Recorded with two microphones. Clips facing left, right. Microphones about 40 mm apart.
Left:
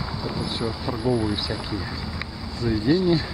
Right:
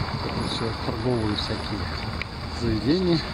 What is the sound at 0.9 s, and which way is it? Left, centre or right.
Speech, centre.